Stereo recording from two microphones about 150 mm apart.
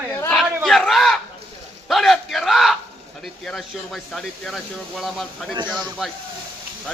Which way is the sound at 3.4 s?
Centre (ahead or behind).